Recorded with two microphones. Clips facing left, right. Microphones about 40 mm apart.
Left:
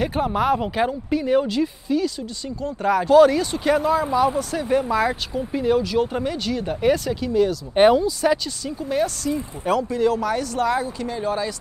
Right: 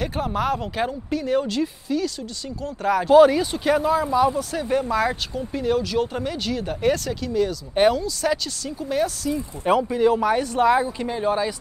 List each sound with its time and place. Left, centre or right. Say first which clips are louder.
0.0 s speech: left 3 dB; centre
8.3 s speech: left 3 dB; centre
9.7 s speech: right 2 dB; centre